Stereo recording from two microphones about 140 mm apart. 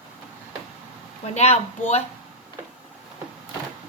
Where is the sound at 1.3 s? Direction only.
50° left (ahead or behind).